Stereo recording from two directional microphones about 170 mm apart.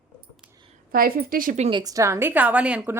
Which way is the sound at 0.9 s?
60° right (ahead or behind).